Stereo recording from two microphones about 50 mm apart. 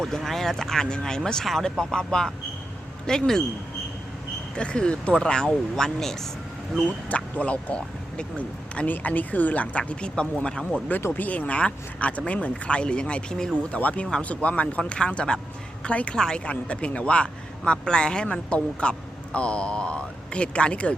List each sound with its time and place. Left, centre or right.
0.0 s speech: centre
4.5 s speech: centre
7.3 s speech: left
8.9 s speech: left; by 10.8 s centre
11.1 s a woman's voice: left; by 13.5 s centre
13.7 s a woman's voice: left
16.1 s speech: centre
16.5 s a woman's voice: left